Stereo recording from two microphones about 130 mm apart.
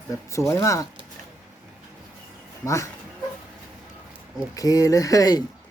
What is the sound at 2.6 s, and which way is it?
Speech, 20° left (ahead or behind).